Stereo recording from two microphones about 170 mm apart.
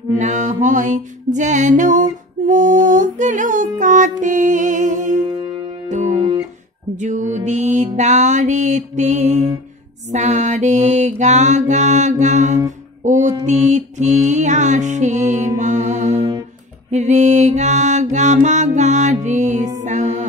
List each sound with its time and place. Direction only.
0.2 s music: 45° right (ahead or behind)
16.2 s music: 25° right (ahead or behind)
16.9 s music: 40° right (ahead or behind)